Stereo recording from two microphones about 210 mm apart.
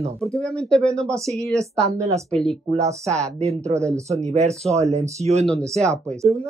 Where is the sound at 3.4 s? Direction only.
30° right (ahead or behind).